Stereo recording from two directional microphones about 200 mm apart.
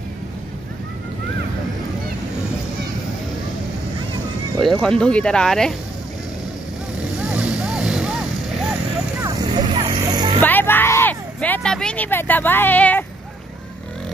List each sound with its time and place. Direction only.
4.6 s speech: centre (ahead or behind)
7.2 s vehicle: 5° right (ahead or behind)
9.2 s vehicle: 20° right (ahead or behind)
10.4 s a sound: 10° left (ahead or behind)